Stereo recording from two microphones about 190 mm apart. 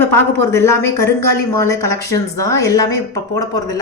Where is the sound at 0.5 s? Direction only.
15° left (ahead or behind).